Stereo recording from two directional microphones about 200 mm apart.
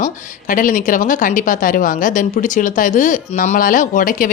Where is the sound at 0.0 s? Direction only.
40° left (ahead or behind).